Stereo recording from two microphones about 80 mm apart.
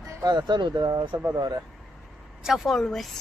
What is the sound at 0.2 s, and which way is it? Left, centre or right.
Speech, right.